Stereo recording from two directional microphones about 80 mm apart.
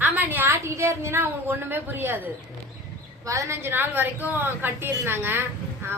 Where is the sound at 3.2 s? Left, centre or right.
Right.